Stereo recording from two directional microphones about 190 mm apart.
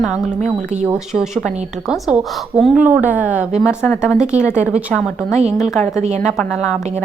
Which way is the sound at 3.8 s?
10° left (ahead or behind).